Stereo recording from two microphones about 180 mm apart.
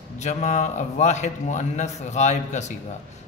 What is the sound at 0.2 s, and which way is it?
A man's voice, 40° left (ahead or behind).